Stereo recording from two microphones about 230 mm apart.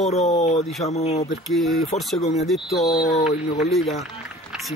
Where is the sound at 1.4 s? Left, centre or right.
Centre.